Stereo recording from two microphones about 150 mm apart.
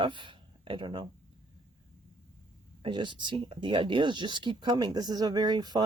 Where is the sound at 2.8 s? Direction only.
30° right (ahead or behind).